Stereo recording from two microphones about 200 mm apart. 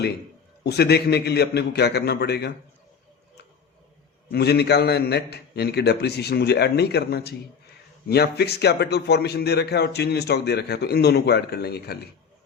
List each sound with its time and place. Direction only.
0.6 s a man's voice: 55° left (ahead or behind)
4.3 s a man's voice: 55° left (ahead or behind)